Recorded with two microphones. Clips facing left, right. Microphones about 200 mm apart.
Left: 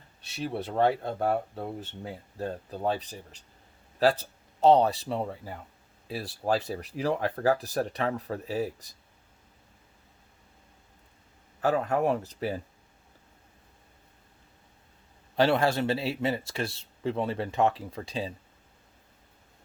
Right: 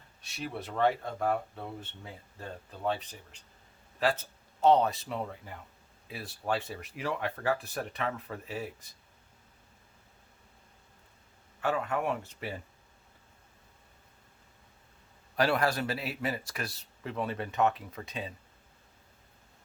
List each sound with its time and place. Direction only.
0.3 s speech: 30° left (ahead or behind)
4.2 s speech: 35° left (ahead or behind)
11.6 s speech: 35° left (ahead or behind)
15.4 s a man's voice: 25° left (ahead or behind)